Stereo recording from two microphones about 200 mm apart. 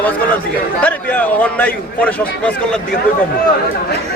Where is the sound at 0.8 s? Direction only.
5° left (ahead or behind).